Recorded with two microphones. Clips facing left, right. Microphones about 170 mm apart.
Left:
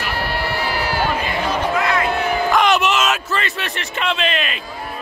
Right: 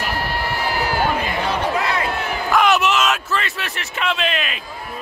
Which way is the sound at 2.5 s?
5° right (ahead or behind).